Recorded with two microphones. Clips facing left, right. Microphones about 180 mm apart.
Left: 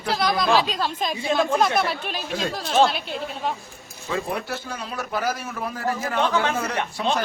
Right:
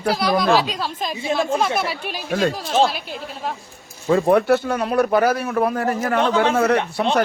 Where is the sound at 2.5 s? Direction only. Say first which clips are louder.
Right 1 dB; 5° right (ahead or behind).